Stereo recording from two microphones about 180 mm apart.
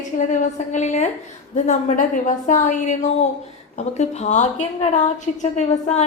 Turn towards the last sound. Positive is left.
turn(degrees=40)  # may be behind; listen again after turning